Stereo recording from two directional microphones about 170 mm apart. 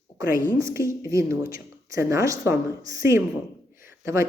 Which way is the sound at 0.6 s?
15° right (ahead or behind).